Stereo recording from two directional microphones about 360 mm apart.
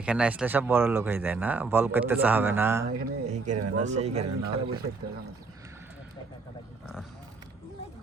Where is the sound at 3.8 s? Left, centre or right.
Centre.